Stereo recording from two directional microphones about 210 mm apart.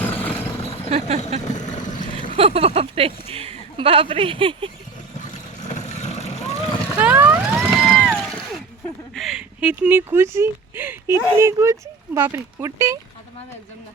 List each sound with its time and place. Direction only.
0.0 s a sound: 10° left (ahead or behind)
0.9 s speech: 30° right (ahead or behind)
1.5 s vehicle: 35° left (ahead or behind)
2.3 s speech: 25° right (ahead or behind)
5.2 s vehicle: 35° left (ahead or behind)
6.9 s vehicle: 5° right (ahead or behind)
9.1 s speech: centre (ahead or behind)